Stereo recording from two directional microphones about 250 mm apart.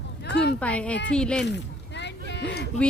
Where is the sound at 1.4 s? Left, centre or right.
Left.